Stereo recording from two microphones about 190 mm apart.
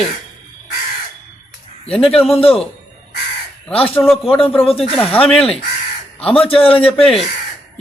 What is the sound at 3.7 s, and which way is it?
Speech, 30° left (ahead or behind).